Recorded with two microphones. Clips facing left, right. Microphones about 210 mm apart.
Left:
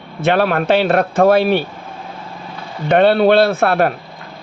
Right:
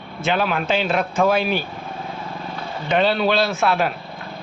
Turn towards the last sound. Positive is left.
turn(degrees=55)  # may be behind; listen again after turning